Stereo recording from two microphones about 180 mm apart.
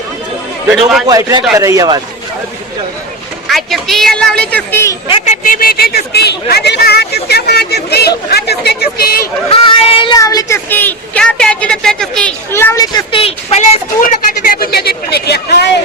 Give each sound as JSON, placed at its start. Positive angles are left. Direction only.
{"t": 0.7, "sound": "speech", "side_deg": -5}
{"t": 1.0, "sound": "a man's voice", "side_deg": -20}
{"t": 3.4, "sound": "speech", "side_deg": 0}
{"t": 5.0, "sound": "speech", "side_deg": 35}
{"t": 9.5, "sound": "speech", "side_deg": 30}